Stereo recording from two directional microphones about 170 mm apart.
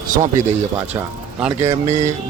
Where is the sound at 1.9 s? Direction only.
45° right (ahead or behind).